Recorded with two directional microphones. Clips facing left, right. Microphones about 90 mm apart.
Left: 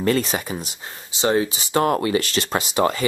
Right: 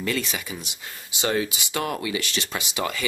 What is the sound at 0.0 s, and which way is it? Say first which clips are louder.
Speech: left 7 dB; 40° left (ahead or behind).